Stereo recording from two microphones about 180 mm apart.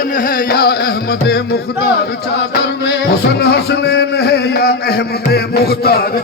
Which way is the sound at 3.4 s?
65° left (ahead or behind).